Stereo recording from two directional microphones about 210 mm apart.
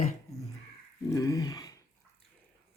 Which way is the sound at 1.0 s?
15° left (ahead or behind).